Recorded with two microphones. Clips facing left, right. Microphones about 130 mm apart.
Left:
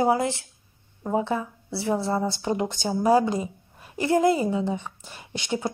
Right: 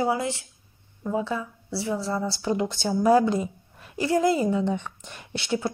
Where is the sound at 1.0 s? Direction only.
40° left (ahead or behind).